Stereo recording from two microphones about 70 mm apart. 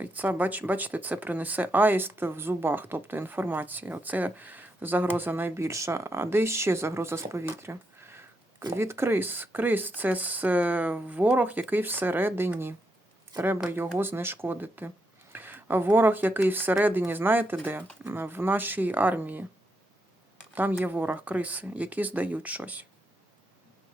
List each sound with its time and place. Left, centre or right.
0.0 s speech: right
20.6 s speech: right